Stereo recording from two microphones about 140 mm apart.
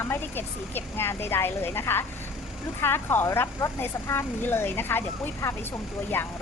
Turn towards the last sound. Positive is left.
turn(degrees=15)  # may be behind; listen again after turning